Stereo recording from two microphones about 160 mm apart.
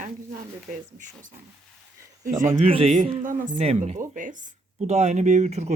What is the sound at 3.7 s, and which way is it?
Speech, 45° right (ahead or behind).